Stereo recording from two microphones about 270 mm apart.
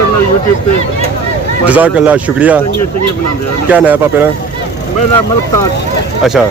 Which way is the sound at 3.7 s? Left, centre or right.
Centre.